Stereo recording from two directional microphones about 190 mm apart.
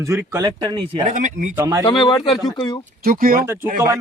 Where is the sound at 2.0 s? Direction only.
25° left (ahead or behind).